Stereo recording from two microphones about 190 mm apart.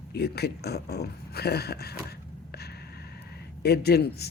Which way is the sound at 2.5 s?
55° left (ahead or behind).